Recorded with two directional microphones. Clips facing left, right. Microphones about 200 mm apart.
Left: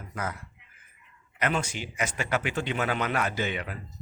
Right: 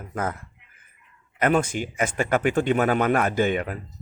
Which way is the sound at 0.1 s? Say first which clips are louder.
Right 6 dB; 50° right (ahead or behind).